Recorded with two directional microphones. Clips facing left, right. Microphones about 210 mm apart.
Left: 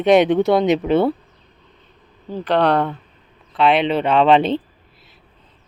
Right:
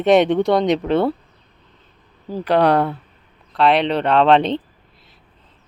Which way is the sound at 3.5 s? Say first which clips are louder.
Even; centre (ahead or behind).